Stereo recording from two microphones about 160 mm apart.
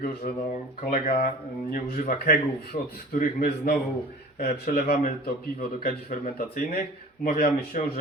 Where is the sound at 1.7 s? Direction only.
60° left (ahead or behind).